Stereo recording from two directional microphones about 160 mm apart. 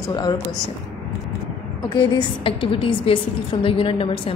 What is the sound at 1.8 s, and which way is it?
A woman's voice, 30° left (ahead or behind).